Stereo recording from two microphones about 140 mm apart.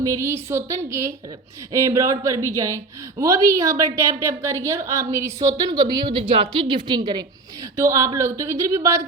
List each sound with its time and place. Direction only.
0.0 s speech: 20° right (ahead or behind)